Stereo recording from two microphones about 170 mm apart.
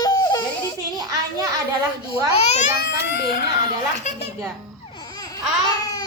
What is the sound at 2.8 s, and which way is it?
Speech, 70° left (ahead or behind).